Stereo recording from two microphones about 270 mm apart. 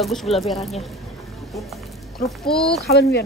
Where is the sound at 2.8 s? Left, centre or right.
Left.